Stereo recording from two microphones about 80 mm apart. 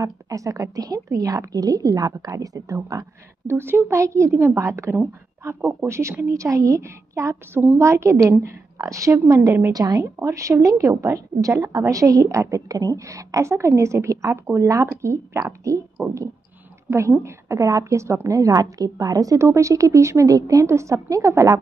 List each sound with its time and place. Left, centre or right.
0.0 s a woman's voice: right
3.4 s a woman's voice: right
9.7 s a woman's voice: right
10.1 s a woman's voice: right